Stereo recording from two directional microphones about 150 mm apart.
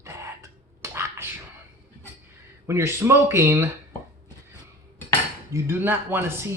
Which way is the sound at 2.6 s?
15° right (ahead or behind).